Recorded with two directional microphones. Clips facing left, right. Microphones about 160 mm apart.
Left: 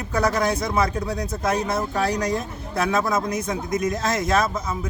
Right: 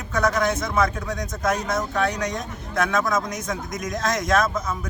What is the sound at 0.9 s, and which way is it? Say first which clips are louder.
A man's voice: left 3 dB; 30° left (ahead or behind).